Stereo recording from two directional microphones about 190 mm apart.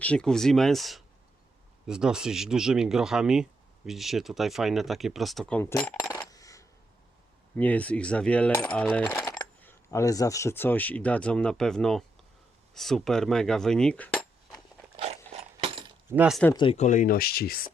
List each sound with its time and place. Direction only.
0.0 s speech: 5° left (ahead or behind)
6.1 s coin: 20° left (ahead or behind)
9.3 s speech: 10° left (ahead or behind)
12.7 s cutlery: centre (ahead or behind)
14.9 s a sound: 35° right (ahead or behind)
16.0 s speech: 5° right (ahead or behind)
16.7 s speech: 40° left (ahead or behind)